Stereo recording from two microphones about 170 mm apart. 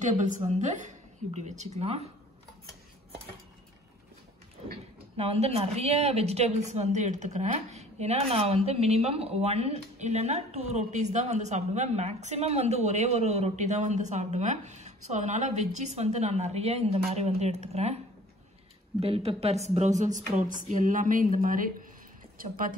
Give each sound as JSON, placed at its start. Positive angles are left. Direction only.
{"t": 0.0, "sound": "a woman's voice", "side_deg": -45}
{"t": 5.1, "sound": "a woman's voice", "side_deg": -35}
{"t": 18.9, "sound": "a woman's voice", "side_deg": -35}